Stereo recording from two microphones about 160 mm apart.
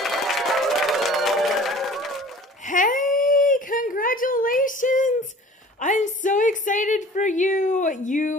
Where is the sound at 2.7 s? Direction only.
55° left (ahead or behind).